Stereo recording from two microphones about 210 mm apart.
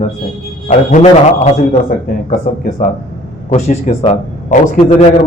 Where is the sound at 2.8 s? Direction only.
40° left (ahead or behind).